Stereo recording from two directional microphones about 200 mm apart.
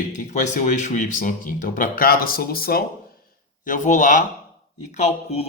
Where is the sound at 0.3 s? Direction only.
35° left (ahead or behind).